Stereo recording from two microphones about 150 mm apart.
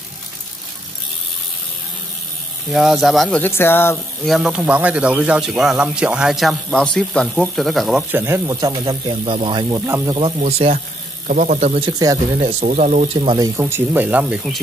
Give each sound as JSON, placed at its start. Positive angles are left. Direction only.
{"t": 2.7, "sound": "speech", "side_deg": 0}
{"t": 3.4, "sound": "speech", "side_deg": 15}
{"t": 4.2, "sound": "speech", "side_deg": 0}
{"t": 8.1, "sound": "speech", "side_deg": -15}
{"t": 8.7, "sound": "speech", "side_deg": -35}
{"t": 9.8, "sound": "speech", "side_deg": -20}
{"t": 11.2, "sound": "a man's voice", "side_deg": -60}
{"t": 11.8, "sound": "speech", "side_deg": -25}
{"t": 12.4, "sound": "speech", "side_deg": -50}
{"t": 13.4, "sound": "speech", "side_deg": -15}